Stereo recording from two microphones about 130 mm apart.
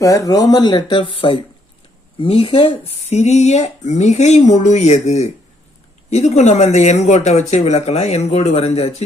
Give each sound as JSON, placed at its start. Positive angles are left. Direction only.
{"t": 0.0, "sound": "speech", "side_deg": 25}